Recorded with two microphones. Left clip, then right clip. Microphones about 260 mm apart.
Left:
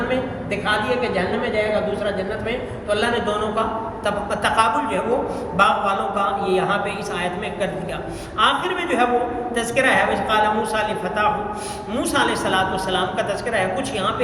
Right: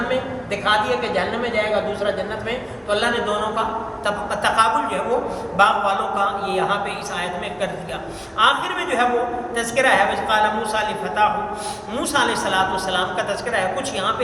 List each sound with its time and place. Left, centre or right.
0.6 s a man's voice: centre
2.5 s a man's voice: centre
8.4 s a man's voice: centre